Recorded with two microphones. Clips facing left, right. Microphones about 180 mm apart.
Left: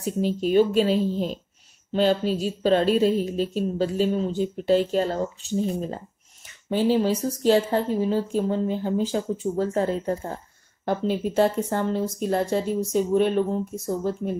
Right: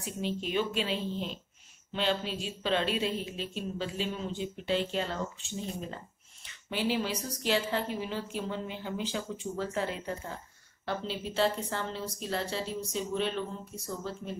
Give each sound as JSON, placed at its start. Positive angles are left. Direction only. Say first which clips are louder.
{"t": 0.0, "sound": "a woman's voice", "louder": "left 10 dB", "side_deg": 40}